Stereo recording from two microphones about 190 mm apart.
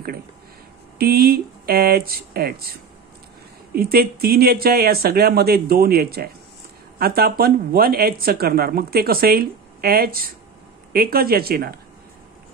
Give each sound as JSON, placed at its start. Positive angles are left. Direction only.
{"t": 0.9, "sound": "speech", "side_deg": -55}